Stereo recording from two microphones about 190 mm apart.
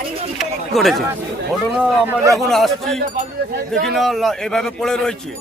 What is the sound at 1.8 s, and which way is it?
Speech, 10° right (ahead or behind).